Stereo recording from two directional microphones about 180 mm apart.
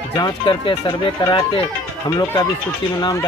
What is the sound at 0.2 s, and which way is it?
Speech, 25° left (ahead or behind).